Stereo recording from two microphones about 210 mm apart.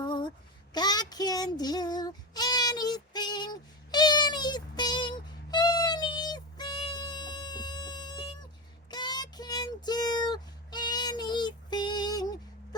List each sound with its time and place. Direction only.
0.0 s child singing: 20° left (ahead or behind)